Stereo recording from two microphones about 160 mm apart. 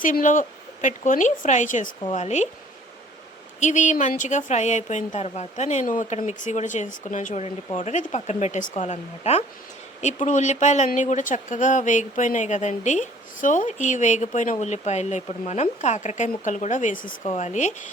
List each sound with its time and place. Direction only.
0.0 s speech: 55° left (ahead or behind)
3.6 s speech: 50° left (ahead or behind)